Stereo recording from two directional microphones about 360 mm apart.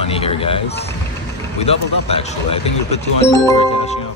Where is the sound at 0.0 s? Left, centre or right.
Centre.